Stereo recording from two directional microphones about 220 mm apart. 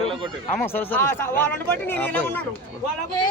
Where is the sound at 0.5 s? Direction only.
10° left (ahead or behind).